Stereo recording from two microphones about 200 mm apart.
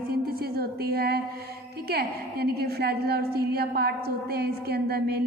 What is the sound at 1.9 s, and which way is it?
A woman's voice, 50° right (ahead or behind).